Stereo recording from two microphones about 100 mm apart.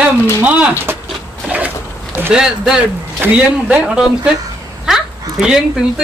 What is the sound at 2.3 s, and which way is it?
A man's voice, 5° right (ahead or behind).